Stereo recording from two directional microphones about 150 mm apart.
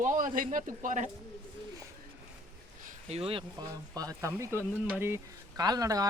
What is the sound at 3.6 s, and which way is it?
Speech, 25° right (ahead or behind).